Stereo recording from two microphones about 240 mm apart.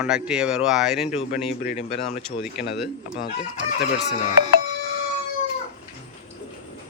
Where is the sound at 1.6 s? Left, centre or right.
Left.